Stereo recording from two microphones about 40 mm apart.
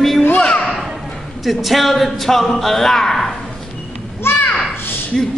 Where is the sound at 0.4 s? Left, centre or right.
Left.